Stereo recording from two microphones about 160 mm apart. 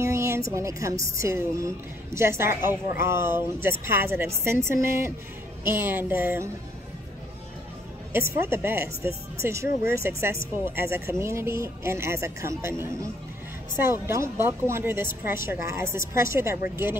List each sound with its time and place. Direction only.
0.0 s music: 15° right (ahead or behind)
0.5 s a woman's voice: 20° right (ahead or behind)
8.4 s speech: 15° right (ahead or behind)